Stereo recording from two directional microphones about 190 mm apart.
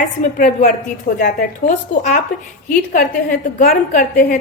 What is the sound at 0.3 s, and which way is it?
A woman's voice, 45° left (ahead or behind).